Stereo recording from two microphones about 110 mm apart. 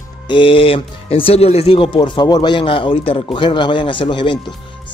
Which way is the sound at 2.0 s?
40° left (ahead or behind).